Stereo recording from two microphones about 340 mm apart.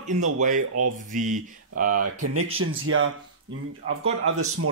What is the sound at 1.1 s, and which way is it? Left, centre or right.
Speech, right.